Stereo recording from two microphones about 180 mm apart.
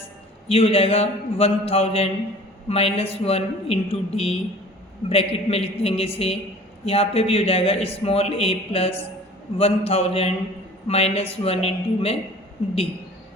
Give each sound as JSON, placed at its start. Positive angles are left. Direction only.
{"t": 0.4, "sound": "a man's voice", "side_deg": 35}